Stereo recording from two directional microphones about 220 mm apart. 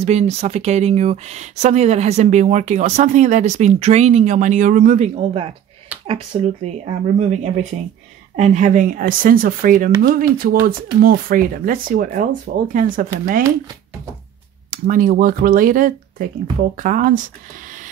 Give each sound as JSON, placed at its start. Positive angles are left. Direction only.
{"t": 0.0, "sound": "speech", "side_deg": -30}
{"t": 8.4, "sound": "speech", "side_deg": -35}
{"t": 14.7, "sound": "speech", "side_deg": -40}